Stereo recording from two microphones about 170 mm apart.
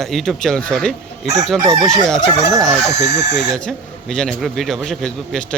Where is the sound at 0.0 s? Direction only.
Centre (ahead or behind).